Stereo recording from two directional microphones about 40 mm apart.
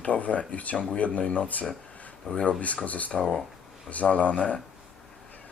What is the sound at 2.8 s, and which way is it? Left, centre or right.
Speech, left.